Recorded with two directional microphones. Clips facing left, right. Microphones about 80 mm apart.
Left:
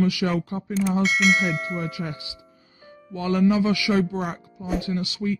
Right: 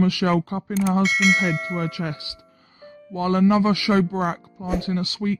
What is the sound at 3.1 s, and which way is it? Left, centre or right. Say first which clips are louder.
Speech: right 2 dB; right.